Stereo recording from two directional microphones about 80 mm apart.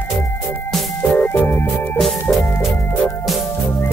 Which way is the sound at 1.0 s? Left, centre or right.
Left.